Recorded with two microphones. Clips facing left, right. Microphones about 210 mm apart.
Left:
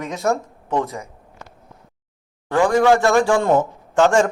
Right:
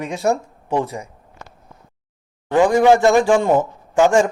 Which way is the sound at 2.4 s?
20° right (ahead or behind).